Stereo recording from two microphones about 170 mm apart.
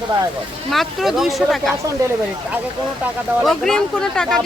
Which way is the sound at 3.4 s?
5° left (ahead or behind).